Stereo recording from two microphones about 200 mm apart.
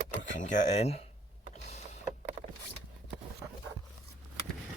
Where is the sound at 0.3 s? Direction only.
40° left (ahead or behind).